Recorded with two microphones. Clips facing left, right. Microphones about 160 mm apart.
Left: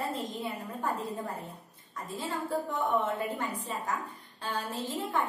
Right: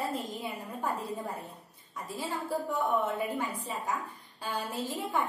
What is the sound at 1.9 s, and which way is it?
A woman's voice, 10° right (ahead or behind).